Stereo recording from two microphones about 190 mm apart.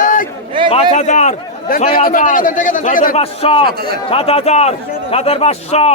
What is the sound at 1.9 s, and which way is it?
A man's voice, 45° left (ahead or behind).